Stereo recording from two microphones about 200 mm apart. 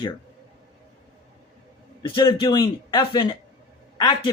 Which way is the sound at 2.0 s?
20° left (ahead or behind).